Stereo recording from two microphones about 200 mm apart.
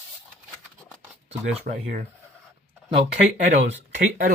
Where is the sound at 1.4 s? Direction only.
45° right (ahead or behind).